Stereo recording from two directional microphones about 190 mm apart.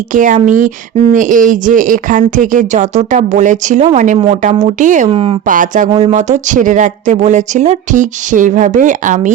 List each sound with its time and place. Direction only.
0.1 s speech: 45° right (ahead or behind)
5.1 s speech: 30° right (ahead or behind)
5.5 s speech: 45° right (ahead or behind)
5.9 s speech: 35° right (ahead or behind)